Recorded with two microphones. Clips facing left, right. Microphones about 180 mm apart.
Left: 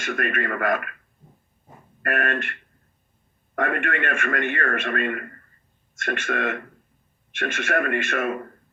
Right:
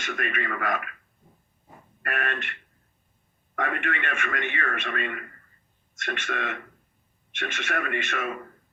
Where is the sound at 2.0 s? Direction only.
50° left (ahead or behind).